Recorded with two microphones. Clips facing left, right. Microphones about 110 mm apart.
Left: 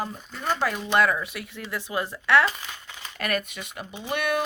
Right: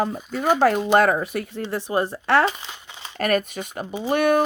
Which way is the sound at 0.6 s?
45° right (ahead or behind).